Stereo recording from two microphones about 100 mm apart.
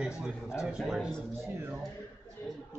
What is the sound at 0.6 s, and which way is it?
Speech, 5° right (ahead or behind).